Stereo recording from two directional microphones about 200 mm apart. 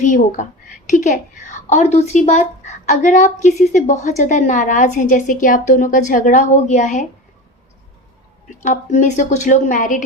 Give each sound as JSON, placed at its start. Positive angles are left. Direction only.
{"t": 0.0, "sound": "a woman's voice", "side_deg": 40}
{"t": 8.4, "sound": "a woman's voice", "side_deg": 35}